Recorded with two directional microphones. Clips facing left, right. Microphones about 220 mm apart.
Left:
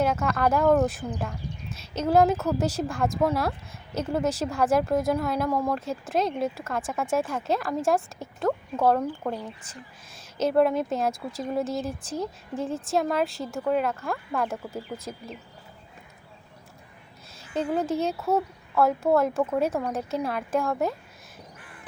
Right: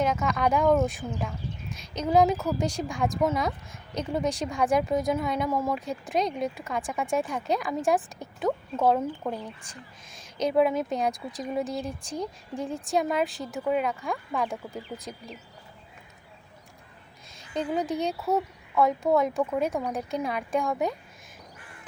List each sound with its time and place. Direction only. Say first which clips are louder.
0.0 s speech: left 1 dB; 5° left (ahead or behind)
10.3 s speech: left 1 dB; centre (ahead or behind)
17.3 s speech: left 2 dB; 5° left (ahead or behind)